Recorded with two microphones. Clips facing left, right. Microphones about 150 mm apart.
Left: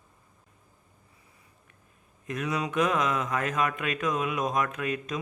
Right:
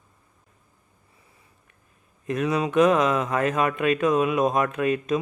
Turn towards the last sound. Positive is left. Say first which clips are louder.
# right 8 dB
turn(degrees=-30)  # may be behind; listen again after turning